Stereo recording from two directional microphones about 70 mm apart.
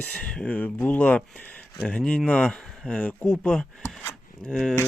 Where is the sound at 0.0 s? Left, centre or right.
Centre.